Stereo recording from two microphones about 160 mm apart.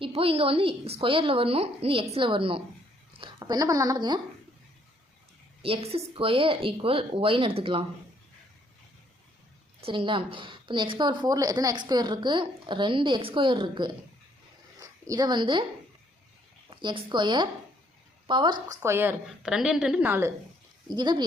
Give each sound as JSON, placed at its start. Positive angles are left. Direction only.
{"t": 0.0, "sound": "a woman's voice", "side_deg": -35}
{"t": 5.6, "sound": "speech", "side_deg": -35}
{"t": 9.8, "sound": "a woman's voice", "side_deg": -35}
{"t": 16.6, "sound": "a woman's voice", "side_deg": -30}
{"t": 18.7, "sound": "a woman's voice", "side_deg": -15}
{"t": 19.4, "sound": "a woman's voice", "side_deg": -5}
{"t": 20.9, "sound": "a woman's voice", "side_deg": -25}